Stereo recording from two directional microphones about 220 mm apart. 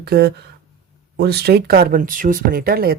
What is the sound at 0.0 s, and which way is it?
Speech, 45° right (ahead or behind).